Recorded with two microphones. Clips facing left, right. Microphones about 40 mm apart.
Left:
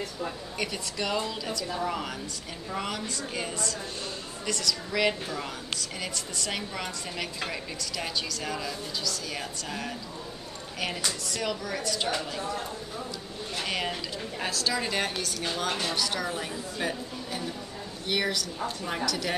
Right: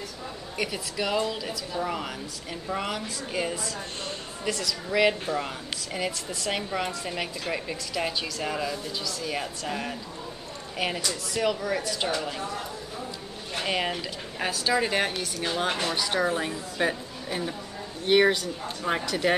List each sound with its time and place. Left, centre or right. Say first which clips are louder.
0.6 s a woman's voice: right 3 dB; centre
11.3 s speech: right 8 dB; centre
13.7 s a woman's voice: right 4 dB; centre